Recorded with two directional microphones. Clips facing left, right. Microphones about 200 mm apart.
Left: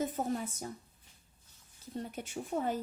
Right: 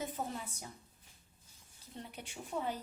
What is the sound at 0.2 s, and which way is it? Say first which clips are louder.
Speech: left 6 dB; 40° left (ahead or behind).